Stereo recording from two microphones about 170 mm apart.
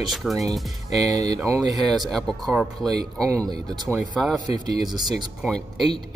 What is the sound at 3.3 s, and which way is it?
Speech, 20° right (ahead or behind).